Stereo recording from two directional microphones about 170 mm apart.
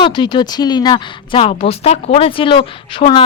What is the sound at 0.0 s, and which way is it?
Speech, 25° left (ahead or behind).